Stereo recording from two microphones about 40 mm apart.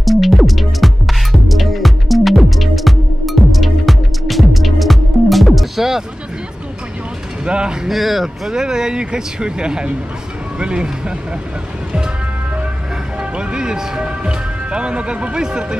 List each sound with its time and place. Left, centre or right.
0.0 s music: centre
7.4 s speech: right
7.9 s speech: centre
8.5 s speech: centre
13.2 s speech: right